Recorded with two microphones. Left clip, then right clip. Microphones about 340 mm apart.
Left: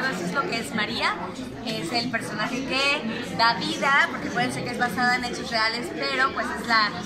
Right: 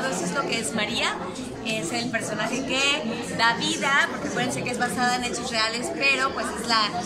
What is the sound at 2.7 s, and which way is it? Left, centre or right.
A woman's voice, centre.